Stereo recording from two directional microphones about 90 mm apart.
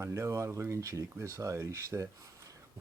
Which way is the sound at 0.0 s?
35° right (ahead or behind).